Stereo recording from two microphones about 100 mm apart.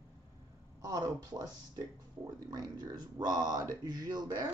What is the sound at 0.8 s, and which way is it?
Speech, 40° right (ahead or behind).